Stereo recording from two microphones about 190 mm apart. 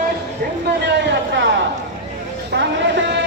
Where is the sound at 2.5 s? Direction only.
60° right (ahead or behind).